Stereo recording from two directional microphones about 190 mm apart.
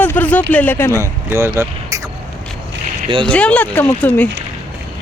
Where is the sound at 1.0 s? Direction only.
15° right (ahead or behind).